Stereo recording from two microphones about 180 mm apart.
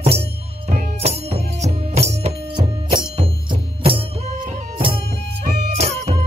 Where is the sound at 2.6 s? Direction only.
25° right (ahead or behind).